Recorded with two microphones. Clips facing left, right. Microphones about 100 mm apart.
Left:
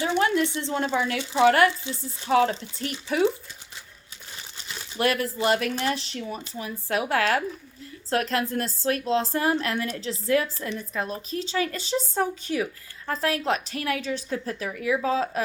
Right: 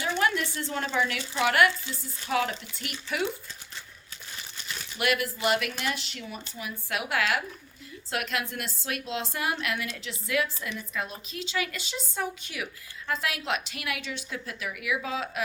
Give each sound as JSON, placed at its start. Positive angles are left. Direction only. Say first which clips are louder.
{"t": 0.0, "sound": "a sound", "louder": "left 4 dB", "side_deg": 30}
{"t": 0.9, "sound": "a woman's voice", "louder": "left 4 dB", "side_deg": 30}
{"t": 4.5, "sound": "a woman's voice", "louder": "left 7 dB", "side_deg": 35}